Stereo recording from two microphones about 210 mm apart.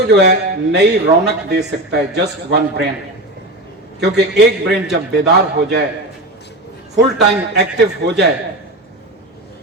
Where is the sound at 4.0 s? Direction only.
55° right (ahead or behind).